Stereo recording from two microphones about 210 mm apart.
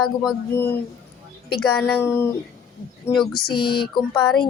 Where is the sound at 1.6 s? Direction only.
10° left (ahead or behind).